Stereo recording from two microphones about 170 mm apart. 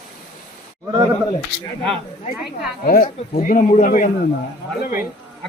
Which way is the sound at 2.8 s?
50° left (ahead or behind).